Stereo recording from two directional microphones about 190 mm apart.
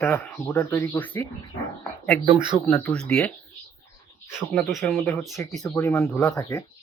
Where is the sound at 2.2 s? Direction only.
25° right (ahead or behind).